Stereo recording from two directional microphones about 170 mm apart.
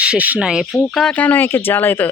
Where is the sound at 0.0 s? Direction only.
10° right (ahead or behind).